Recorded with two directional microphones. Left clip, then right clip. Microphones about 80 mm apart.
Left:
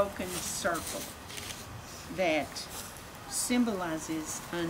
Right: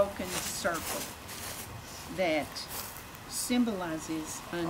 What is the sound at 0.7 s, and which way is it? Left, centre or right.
Speech, right.